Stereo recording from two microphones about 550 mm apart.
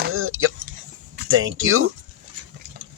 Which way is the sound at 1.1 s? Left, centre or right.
Centre.